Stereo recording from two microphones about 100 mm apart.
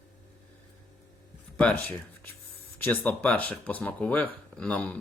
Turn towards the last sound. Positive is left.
turn(degrees=15)  # may be behind; listen again after turning